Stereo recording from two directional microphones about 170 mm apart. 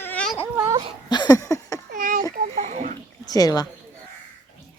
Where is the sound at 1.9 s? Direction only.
55° right (ahead or behind).